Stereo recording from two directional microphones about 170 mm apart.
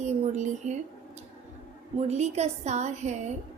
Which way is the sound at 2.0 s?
40° right (ahead or behind).